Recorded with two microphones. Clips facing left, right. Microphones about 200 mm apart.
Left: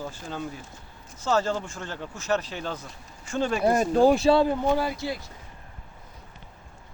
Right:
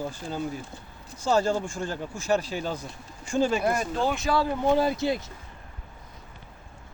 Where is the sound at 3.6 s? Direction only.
40° left (ahead or behind).